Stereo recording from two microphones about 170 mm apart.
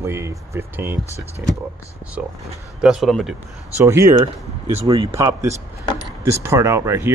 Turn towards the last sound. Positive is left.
turn(degrees=-15)  # may be behind; listen again after turning